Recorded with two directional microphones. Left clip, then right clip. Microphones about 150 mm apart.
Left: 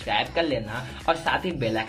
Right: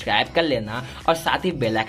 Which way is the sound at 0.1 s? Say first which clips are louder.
Right 4 dB; 25° right (ahead or behind).